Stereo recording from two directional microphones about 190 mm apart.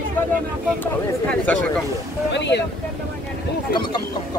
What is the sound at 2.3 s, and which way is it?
Speech, 65° left (ahead or behind).